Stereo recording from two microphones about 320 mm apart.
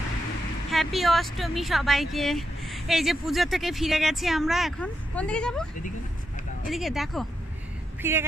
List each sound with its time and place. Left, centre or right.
0.7 s speech: centre
6.7 s speech: centre